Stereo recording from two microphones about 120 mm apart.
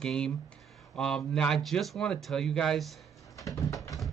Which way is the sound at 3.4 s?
30° left (ahead or behind).